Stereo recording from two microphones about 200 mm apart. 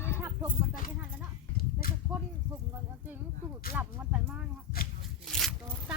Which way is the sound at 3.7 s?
10° right (ahead or behind).